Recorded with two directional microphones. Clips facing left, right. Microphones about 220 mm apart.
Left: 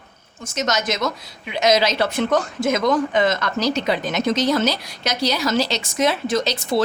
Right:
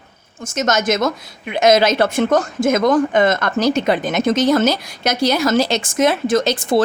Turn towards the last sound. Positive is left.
turn(degrees=-50)  # may be behind; listen again after turning